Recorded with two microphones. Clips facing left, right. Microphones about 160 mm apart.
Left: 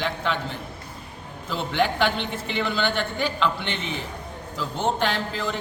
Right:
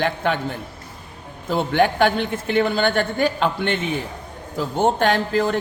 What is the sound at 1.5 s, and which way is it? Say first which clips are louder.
A man's voice: right 6 dB; 50° right (ahead or behind).